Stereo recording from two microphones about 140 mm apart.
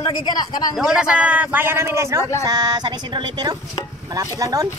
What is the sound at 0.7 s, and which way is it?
A man's voice, 5° right (ahead or behind).